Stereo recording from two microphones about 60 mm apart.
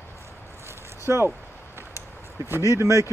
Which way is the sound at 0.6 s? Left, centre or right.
Right.